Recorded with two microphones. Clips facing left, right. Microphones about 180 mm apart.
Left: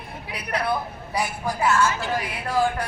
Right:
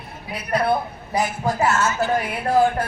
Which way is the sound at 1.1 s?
45° right (ahead or behind).